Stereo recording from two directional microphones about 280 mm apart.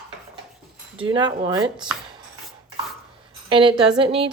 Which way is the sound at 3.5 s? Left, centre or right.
Centre.